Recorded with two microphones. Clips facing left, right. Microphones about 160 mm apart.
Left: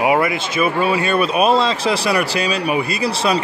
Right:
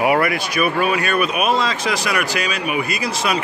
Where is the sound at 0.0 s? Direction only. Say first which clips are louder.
Left 1 dB; 20° left (ahead or behind).